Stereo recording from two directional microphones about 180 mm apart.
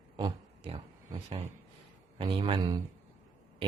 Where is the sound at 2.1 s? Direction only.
30° right (ahead or behind).